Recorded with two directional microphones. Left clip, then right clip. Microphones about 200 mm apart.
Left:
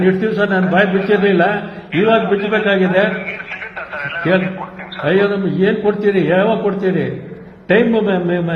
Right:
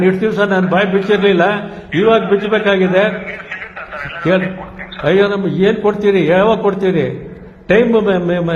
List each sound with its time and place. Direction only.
0.0 s a man's voice: 30° right (ahead or behind)
3.5 s a sound: 20° right (ahead or behind)
5.0 s a man's voice: 30° right (ahead or behind)